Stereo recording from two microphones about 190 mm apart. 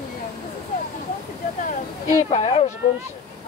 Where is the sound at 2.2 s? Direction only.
35° left (ahead or behind).